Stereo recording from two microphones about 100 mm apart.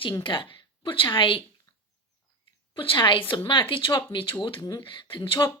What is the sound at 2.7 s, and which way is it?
Speech, 60° left (ahead or behind).